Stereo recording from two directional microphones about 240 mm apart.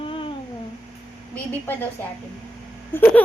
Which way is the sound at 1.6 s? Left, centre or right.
Centre.